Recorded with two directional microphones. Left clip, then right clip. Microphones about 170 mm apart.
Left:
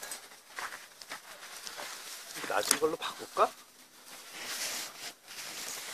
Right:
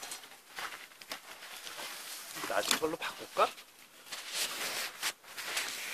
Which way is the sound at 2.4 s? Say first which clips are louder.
Left 2 dB; 30° right (ahead or behind).